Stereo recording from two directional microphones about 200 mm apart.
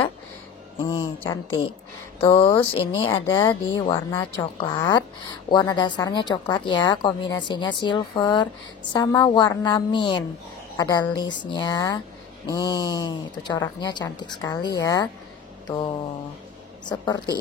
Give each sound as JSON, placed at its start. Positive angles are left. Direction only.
{"t": 0.8, "sound": "a woman's voice", "side_deg": 20}
{"t": 16.8, "sound": "a woman's voice", "side_deg": 20}